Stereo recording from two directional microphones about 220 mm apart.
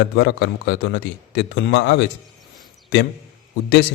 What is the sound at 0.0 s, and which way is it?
Speech, 55° left (ahead or behind).